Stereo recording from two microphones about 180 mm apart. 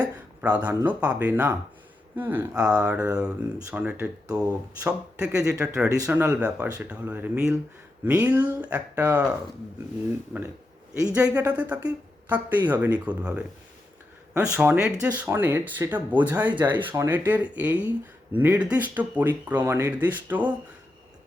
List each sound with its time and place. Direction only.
0.4 s speech: 10° right (ahead or behind)
5.7 s speech: 15° right (ahead or behind)
11.0 s speech: 5° right (ahead or behind)